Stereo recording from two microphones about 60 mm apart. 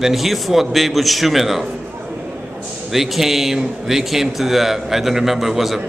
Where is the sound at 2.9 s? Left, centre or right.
Centre.